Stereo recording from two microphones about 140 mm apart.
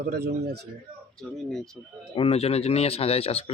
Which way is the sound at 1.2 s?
Centre (ahead or behind).